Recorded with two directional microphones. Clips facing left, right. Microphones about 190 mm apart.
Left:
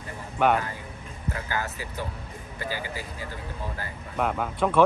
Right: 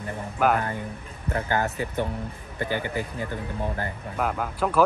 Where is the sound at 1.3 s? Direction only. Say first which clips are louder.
Right 6 dB; 55° right (ahead or behind).